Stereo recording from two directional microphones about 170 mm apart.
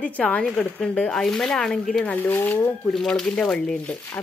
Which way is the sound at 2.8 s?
Centre (ahead or behind).